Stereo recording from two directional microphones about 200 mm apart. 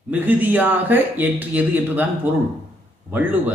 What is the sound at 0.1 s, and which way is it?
Speech, 10° right (ahead or behind).